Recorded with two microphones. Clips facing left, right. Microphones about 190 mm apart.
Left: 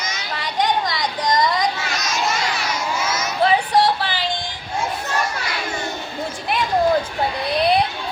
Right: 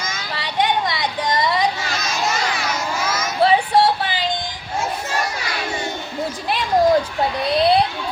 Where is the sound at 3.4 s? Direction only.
25° right (ahead or behind).